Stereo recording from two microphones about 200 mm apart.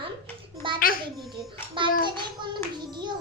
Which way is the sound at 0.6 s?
25° right (ahead or behind).